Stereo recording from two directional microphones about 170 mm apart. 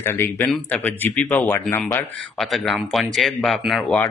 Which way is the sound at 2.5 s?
Centre (ahead or behind).